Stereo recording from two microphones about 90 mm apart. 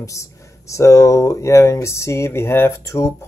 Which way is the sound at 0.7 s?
35° left (ahead or behind).